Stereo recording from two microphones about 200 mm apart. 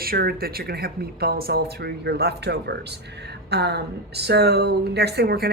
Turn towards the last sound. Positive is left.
turn(degrees=-55)  # may be behind; listen again after turning